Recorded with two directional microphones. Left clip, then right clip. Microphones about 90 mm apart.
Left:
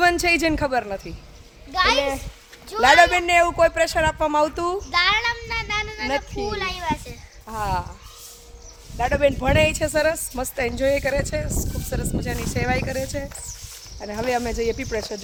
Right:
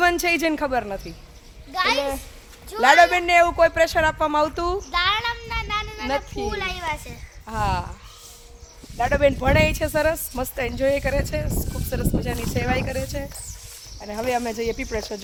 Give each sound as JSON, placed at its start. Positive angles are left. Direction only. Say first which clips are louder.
{"t": 0.0, "sound": "speech", "louder": "left 1 dB", "side_deg": -35}
{"t": 1.7, "sound": "a child's voice", "louder": "left 2 dB", "side_deg": 30}
{"t": 2.8, "sound": "speech", "louder": "even", "side_deg": -55}
{"t": 3.2, "sound": "speech", "louder": "right 1 dB", "side_deg": -65}
{"t": 4.9, "sound": "a sound", "louder": "left 4 dB", "side_deg": -15}
{"t": 6.5, "sound": "a child's voice", "louder": "left 2 dB", "side_deg": -55}
{"t": 9.0, "sound": "speech", "louder": "even", "side_deg": -90}
{"t": 9.6, "sound": "speech", "louder": "left 1 dB", "side_deg": -45}
{"t": 9.9, "sound": "speech", "louder": "left 1 dB", "side_deg": -30}